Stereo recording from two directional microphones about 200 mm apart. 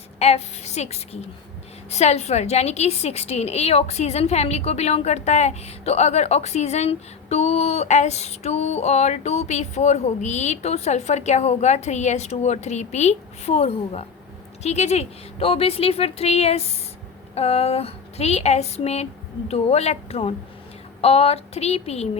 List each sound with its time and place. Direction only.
0.2 s a woman's voice: 35° left (ahead or behind)